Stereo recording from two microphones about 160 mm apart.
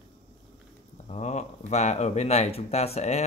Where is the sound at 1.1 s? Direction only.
45° left (ahead or behind).